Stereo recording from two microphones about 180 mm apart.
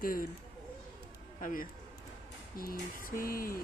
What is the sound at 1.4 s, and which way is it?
A woman's voice, 50° left (ahead or behind).